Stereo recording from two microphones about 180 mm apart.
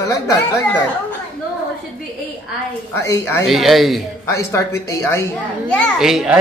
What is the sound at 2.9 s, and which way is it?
Speech, 15° left (ahead or behind).